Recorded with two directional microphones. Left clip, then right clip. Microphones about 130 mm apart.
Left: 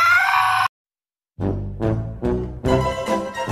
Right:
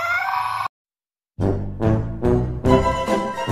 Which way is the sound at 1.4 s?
Centre (ahead or behind).